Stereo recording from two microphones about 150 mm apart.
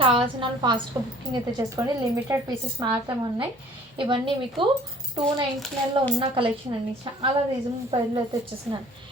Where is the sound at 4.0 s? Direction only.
35° right (ahead or behind).